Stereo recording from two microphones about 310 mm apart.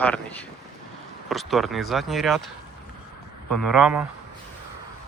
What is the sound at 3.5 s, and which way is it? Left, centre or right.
Speech, centre.